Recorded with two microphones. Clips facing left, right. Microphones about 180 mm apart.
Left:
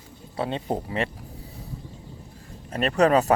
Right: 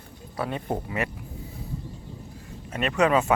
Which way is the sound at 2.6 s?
35° left (ahead or behind).